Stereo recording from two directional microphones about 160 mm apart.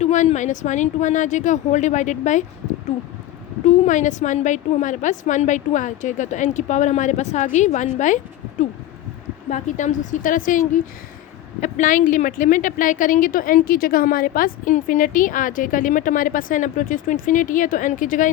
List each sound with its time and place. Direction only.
0.0 s a woman's voice: 45° left (ahead or behind)
3.7 s a woman's voice: 50° left (ahead or behind)